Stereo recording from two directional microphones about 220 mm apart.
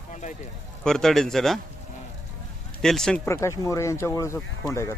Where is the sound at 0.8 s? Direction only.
Centre (ahead or behind).